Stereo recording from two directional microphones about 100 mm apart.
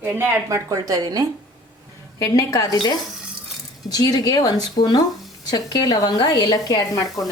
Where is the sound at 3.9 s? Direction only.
40° left (ahead or behind).